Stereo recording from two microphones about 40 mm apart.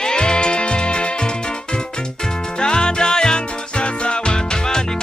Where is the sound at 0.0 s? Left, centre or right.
Left.